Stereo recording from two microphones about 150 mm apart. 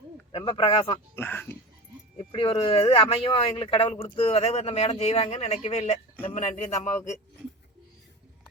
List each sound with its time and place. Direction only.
0.3 s speech: 35° left (ahead or behind)
1.1 s speech: 15° left (ahead or behind)
2.1 s speech: 40° left (ahead or behind)
6.7 s a man's voice: 20° left (ahead or behind)